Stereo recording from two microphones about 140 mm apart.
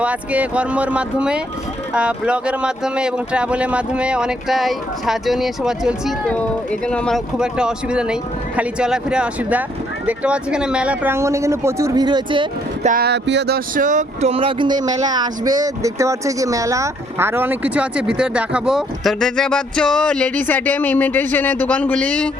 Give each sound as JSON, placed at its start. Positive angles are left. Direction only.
{"t": 0.0, "sound": "speech", "side_deg": -10}
{"t": 6.2, "sound": "speech", "side_deg": 10}
{"t": 7.3, "sound": "speech", "side_deg": -5}
{"t": 12.0, "sound": "speech", "side_deg": -35}
{"t": 12.8, "sound": "speech", "side_deg": -75}